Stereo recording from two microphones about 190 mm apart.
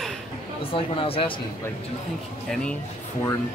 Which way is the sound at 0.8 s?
30° left (ahead or behind).